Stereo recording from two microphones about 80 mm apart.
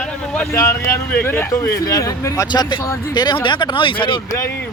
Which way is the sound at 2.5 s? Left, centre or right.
Left.